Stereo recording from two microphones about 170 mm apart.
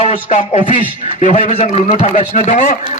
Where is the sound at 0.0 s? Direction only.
40° left (ahead or behind).